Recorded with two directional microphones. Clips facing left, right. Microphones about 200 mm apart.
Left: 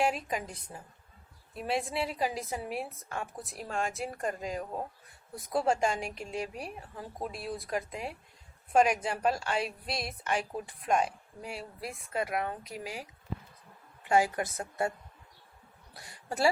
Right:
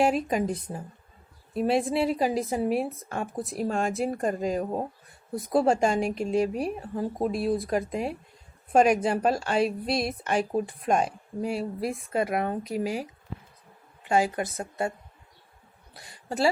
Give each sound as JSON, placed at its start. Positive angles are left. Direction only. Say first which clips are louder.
{"t": 0.0, "sound": "a woman's voice", "louder": "right 7 dB", "side_deg": -35}
{"t": 14.1, "sound": "speech", "louder": "right 2 dB", "side_deg": -25}
{"t": 16.0, "sound": "speech", "louder": "right 4 dB", "side_deg": -20}